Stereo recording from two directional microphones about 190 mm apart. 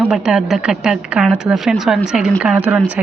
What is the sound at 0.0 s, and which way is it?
A woman's voice, 5° right (ahead or behind).